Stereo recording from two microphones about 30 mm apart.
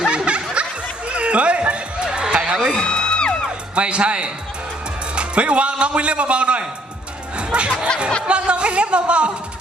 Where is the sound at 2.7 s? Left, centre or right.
Left.